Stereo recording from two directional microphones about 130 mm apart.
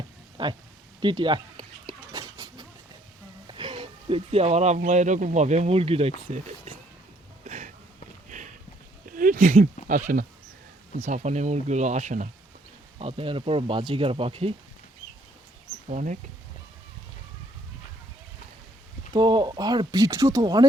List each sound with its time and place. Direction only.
0.4 s speech: 35° right (ahead or behind)
1.0 s dishes: 35° right (ahead or behind)
3.4 s speech: 40° right (ahead or behind)
7.4 s a sound: 55° right (ahead or behind)
8.3 s a sound: 75° right (ahead or behind)
9.0 s a sound: 90° right
9.9 s speech: 90° right
10.9 s speech: 60° right (ahead or behind)
13.0 s speech: 45° right (ahead or behind)
15.9 s speech: 75° right (ahead or behind)
19.1 s speech: 35° right (ahead or behind)